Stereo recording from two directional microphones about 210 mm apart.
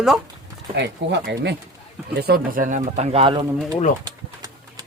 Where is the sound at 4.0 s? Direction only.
20° right (ahead or behind).